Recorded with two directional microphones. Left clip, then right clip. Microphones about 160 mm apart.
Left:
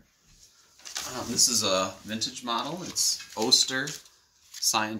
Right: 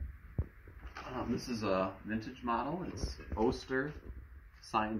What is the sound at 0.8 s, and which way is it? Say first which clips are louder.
Speech: left 7 dB; 35° left (ahead or behind).